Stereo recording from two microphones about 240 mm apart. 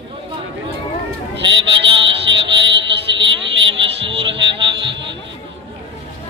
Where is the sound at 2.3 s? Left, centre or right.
Right.